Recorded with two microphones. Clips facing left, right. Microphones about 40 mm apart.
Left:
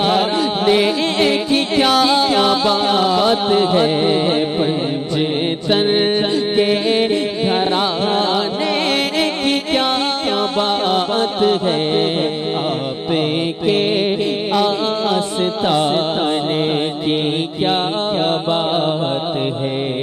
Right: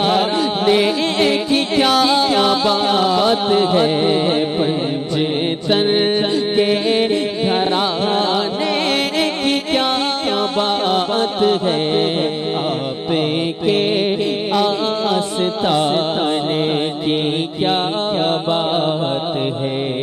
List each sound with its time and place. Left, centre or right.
0.0 s music: centre
5.7 s mantra: centre
6.5 s music: centre
14.5 s music: centre
17.6 s mantra: centre